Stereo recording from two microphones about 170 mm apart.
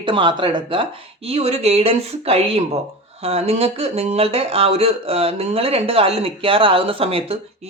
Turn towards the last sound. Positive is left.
turn(degrees=-35)  # may be behind; listen again after turning